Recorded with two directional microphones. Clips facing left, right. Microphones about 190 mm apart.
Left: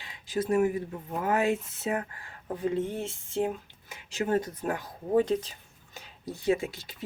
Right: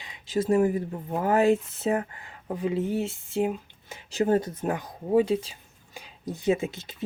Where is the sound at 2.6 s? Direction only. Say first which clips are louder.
Right 3 dB; 5° right (ahead or behind).